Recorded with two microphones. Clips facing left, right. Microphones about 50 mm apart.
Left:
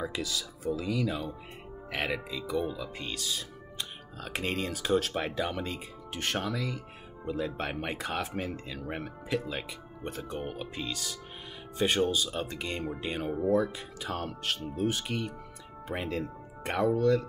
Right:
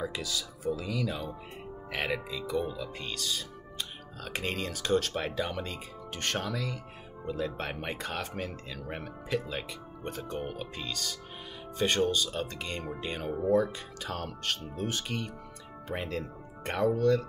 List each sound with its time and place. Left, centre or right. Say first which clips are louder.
0.0 s speech: left 1 dB; centre